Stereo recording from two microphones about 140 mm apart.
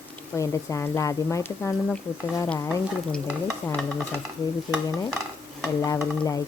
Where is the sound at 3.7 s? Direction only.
5° left (ahead or behind).